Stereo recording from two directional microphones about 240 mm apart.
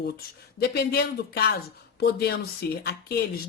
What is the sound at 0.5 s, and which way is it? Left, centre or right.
Speech, left.